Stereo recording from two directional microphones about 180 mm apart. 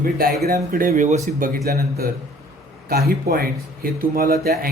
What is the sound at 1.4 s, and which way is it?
Speech, 55° right (ahead or behind).